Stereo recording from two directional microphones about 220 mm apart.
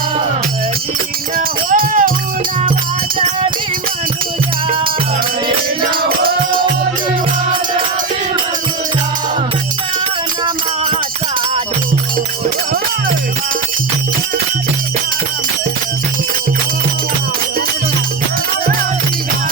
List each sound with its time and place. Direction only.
1.4 s music: 40° right (ahead or behind)
5.9 s music: 40° right (ahead or behind)